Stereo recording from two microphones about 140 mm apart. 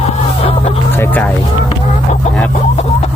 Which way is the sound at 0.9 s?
15° left (ahead or behind).